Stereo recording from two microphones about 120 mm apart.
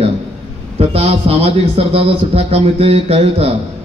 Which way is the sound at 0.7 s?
60° right (ahead or behind).